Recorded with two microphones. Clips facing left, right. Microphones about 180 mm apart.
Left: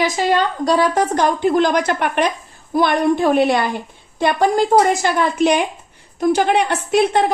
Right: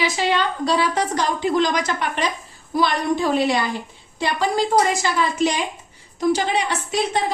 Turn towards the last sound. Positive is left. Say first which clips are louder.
# left 7 dB
turn(degrees=60)  # may be behind; listen again after turning